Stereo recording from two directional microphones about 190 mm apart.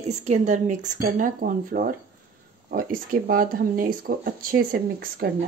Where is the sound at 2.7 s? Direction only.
50° right (ahead or behind).